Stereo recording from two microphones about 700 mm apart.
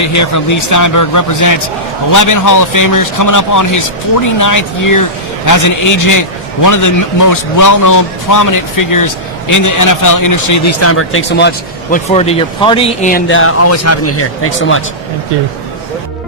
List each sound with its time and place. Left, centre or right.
0.0 s a man's voice: left